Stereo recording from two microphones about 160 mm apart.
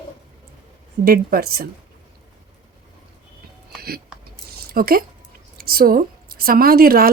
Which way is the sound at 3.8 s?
75° right (ahead or behind).